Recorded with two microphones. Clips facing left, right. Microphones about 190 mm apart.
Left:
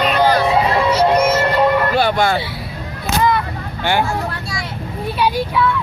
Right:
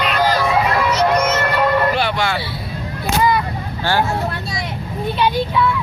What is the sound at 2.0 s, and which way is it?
Vehicle, 45° left (ahead or behind).